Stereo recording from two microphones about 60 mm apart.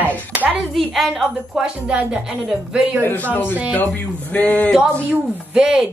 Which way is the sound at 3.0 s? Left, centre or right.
Left.